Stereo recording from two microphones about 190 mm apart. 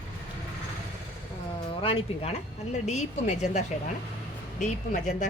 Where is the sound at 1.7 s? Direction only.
30° left (ahead or behind).